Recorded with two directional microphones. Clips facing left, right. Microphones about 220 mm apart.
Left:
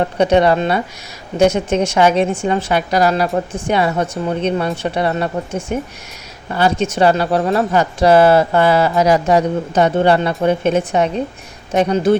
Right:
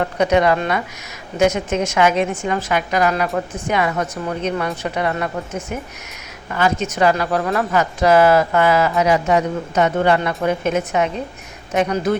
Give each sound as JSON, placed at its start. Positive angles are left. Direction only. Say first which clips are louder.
{"t": 0.0, "sound": "speech", "louder": "left 3 dB", "side_deg": 30}